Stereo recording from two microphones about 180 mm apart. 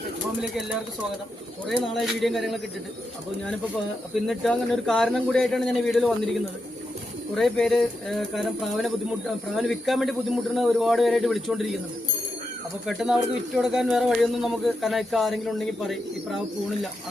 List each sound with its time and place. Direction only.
1.8 s speech: centre (ahead or behind)
4.1 s speech: centre (ahead or behind)
12.8 s speech: centre (ahead or behind)